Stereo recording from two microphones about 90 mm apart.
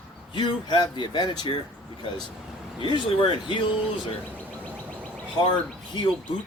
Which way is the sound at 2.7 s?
65° left (ahead or behind).